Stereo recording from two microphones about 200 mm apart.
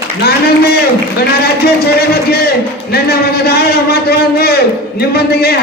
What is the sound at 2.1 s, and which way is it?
A man's voice, 50° left (ahead or behind).